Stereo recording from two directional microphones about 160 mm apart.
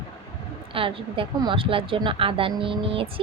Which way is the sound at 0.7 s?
35° right (ahead or behind).